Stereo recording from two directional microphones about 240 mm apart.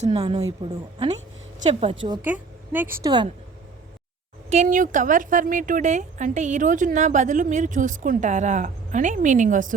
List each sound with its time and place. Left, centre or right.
0.0 s a woman's voice: right
1.5 s a woman's voice: right
2.2 s a woman's voice: centre
4.5 s speech: right